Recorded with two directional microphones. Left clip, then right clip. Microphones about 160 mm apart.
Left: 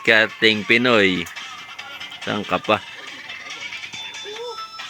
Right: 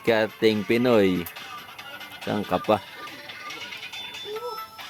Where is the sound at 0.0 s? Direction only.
10° right (ahead or behind).